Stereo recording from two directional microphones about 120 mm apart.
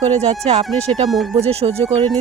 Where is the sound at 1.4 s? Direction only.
60° right (ahead or behind).